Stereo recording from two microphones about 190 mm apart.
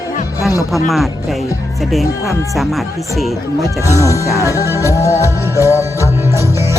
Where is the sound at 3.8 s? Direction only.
15° left (ahead or behind).